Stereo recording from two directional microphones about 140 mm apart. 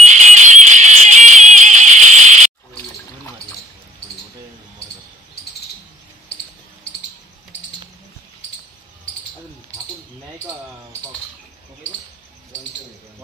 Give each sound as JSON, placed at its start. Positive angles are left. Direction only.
{"t": 0.1, "sound": "music", "side_deg": -60}